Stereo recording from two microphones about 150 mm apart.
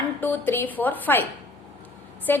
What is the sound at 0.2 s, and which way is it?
A woman's voice, 15° left (ahead or behind).